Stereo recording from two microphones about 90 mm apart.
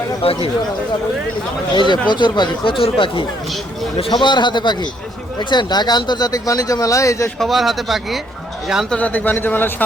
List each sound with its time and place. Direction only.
0.2 s speech: 90° left
1.7 s a man's voice: 60° left (ahead or behind)
2.7 s speech: 80° left
4.1 s a man's voice: 55° left (ahead or behind); by 7.3 s 35° left (ahead or behind)
7.3 s speech: centre (ahead or behind)
8.9 s speech: 15° left (ahead or behind)